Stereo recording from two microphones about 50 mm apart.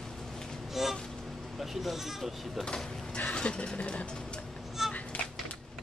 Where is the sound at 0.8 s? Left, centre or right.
Centre.